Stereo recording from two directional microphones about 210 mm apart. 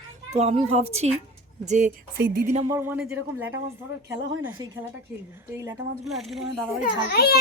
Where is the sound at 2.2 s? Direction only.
45° right (ahead or behind).